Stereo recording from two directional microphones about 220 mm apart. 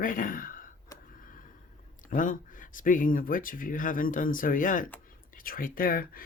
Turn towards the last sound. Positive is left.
turn(degrees=40)  # may be behind; listen again after turning